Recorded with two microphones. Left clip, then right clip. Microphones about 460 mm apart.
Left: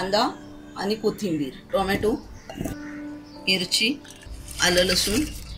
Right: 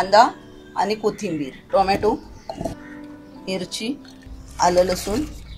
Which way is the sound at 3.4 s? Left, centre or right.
Centre.